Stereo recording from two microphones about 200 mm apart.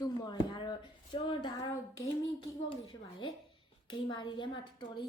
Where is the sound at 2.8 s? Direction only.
25° left (ahead or behind).